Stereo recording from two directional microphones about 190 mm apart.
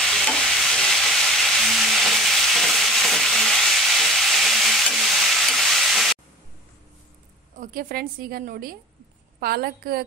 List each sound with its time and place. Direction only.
0.1 s stir: centre (ahead or behind)
7.6 s a woman's voice: 50° right (ahead or behind)